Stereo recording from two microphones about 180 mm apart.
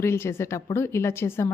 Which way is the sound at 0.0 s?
15° left (ahead or behind).